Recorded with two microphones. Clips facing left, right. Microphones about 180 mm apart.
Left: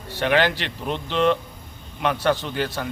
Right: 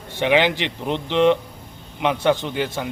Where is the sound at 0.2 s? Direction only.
15° right (ahead or behind).